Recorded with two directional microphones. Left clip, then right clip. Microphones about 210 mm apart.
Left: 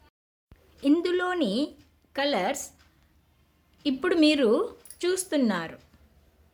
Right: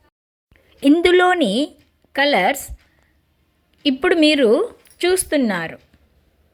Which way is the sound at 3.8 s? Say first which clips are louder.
Right 8 dB; 25° right (ahead or behind).